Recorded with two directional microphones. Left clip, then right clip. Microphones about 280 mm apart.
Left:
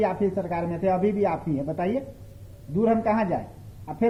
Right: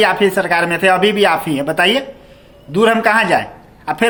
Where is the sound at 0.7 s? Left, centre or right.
Right.